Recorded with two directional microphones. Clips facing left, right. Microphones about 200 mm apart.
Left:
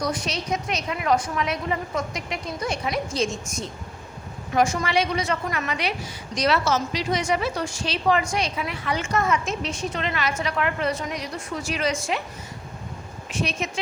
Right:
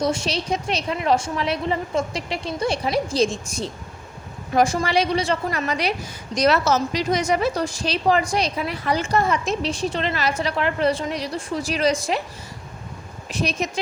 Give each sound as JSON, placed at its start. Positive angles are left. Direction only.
{"t": 0.0, "sound": "a woman's voice", "side_deg": -25}
{"t": 13.3, "sound": "a woman's voice", "side_deg": -40}